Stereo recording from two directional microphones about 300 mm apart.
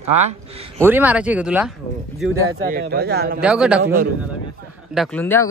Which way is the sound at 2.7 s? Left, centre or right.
Right.